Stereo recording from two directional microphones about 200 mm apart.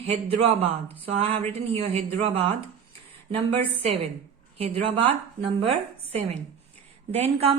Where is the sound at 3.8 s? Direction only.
30° right (ahead or behind).